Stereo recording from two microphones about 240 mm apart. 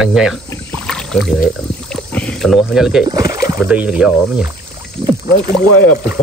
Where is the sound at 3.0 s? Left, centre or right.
Centre.